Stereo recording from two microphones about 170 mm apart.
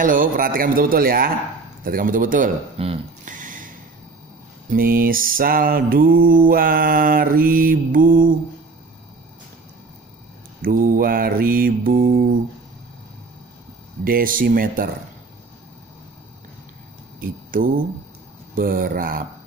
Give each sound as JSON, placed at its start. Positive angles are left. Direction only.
{"t": 0.0, "sound": "mantra", "side_deg": -50}
{"t": 1.9, "sound": "speech", "side_deg": -55}
{"t": 2.8, "sound": "speech", "side_deg": -35}
{"t": 3.3, "sound": "a sound", "side_deg": -50}
{"t": 4.6, "sound": "mantra", "side_deg": -60}
{"t": 10.6, "sound": "mantra", "side_deg": -55}
{"t": 14.0, "sound": "mantra", "side_deg": -55}
{"t": 17.5, "sound": "mantra", "side_deg": -55}